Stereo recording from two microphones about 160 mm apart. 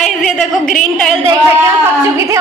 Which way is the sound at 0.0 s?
5° left (ahead or behind).